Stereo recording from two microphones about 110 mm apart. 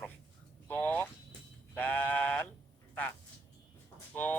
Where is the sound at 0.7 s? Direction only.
20° left (ahead or behind).